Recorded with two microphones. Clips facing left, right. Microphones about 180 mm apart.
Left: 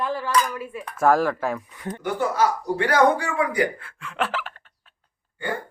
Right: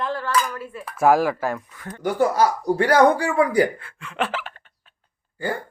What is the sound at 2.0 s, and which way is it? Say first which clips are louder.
Speech: right 3 dB; 40° right (ahead or behind).